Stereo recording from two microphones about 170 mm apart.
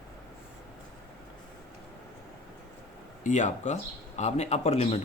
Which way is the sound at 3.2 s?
45° left (ahead or behind).